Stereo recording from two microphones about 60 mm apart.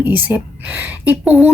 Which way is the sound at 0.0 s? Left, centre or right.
Right.